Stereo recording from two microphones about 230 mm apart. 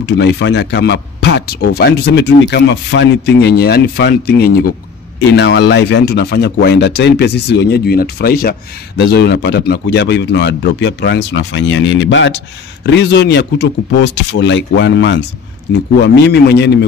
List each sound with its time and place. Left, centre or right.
0.0 s speech: left